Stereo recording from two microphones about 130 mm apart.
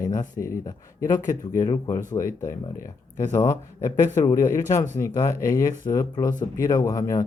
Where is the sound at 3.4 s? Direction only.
25° left (ahead or behind).